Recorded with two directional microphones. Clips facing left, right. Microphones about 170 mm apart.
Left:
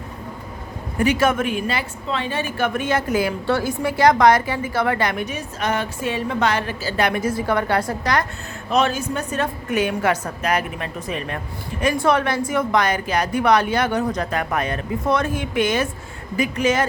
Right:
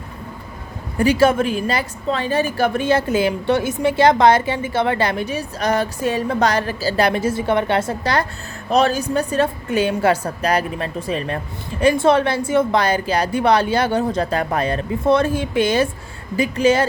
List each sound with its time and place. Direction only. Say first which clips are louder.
0.9 s a woman's voice: right 4 dB; 30° right (ahead or behind)